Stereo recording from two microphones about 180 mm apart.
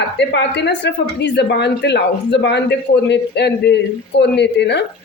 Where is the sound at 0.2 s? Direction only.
75° left (ahead or behind).